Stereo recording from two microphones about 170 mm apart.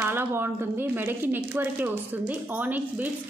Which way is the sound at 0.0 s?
15° right (ahead or behind).